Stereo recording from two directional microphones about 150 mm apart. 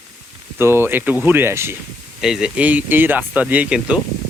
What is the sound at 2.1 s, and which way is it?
Speech, 5° right (ahead or behind).